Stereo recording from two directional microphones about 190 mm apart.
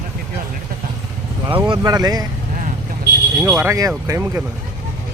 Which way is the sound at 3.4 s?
10° right (ahead or behind).